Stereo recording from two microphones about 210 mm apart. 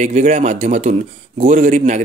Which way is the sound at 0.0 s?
35° right (ahead or behind).